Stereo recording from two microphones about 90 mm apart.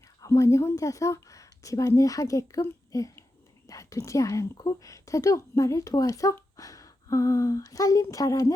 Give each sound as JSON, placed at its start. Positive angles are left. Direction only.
{"t": 0.3, "sound": "a woman's voice", "side_deg": 35}